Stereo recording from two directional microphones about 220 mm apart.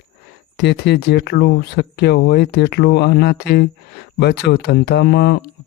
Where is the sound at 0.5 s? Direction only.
50° left (ahead or behind).